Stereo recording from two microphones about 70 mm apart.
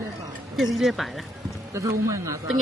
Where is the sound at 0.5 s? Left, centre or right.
Centre.